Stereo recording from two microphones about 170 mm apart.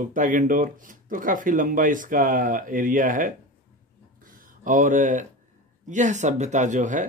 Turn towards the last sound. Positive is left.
turn(degrees=-45)  # may be behind; listen again after turning